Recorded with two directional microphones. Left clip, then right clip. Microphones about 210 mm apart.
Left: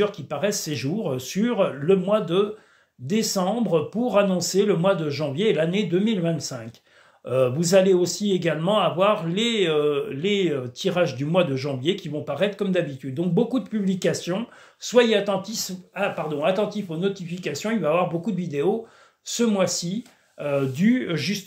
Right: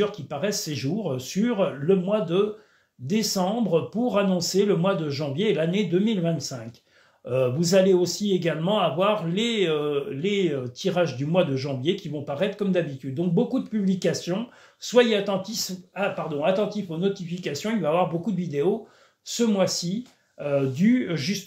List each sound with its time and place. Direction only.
0.0 s speech: 20° left (ahead or behind)